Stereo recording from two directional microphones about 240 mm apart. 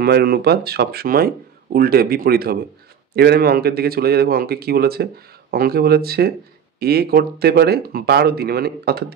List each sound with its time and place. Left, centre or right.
0.0 s speech: right